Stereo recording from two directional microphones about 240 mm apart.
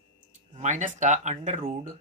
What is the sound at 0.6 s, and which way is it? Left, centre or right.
Speech, right.